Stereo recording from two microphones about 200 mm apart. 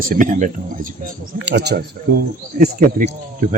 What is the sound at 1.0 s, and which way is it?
Speech, 55° right (ahead or behind).